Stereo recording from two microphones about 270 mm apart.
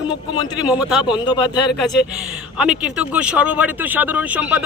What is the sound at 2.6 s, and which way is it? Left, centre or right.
Speech, centre.